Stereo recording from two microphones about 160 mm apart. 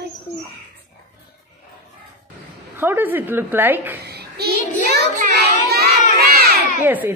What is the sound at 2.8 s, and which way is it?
A woman's voice, 10° right (ahead or behind).